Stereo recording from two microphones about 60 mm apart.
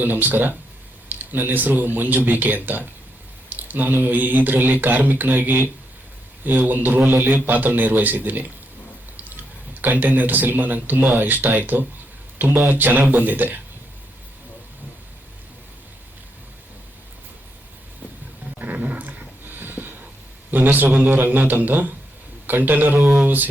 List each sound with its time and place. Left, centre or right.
0.0 s speech: right
9.8 s speech: right
18.6 s wild animals: right
19.5 s a sound: right
20.5 s speech: right
23.2 s a sound: right